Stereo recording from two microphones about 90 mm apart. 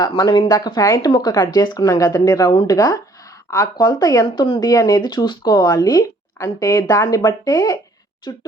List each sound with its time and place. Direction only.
0.2 s speech: 50° left (ahead or behind)
7.2 s speech: 50° left (ahead or behind)